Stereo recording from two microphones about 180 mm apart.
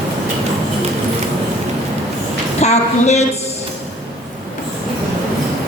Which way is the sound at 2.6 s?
40° left (ahead or behind).